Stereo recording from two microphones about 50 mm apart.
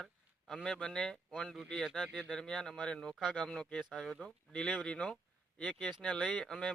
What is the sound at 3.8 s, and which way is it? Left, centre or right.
Speech, centre.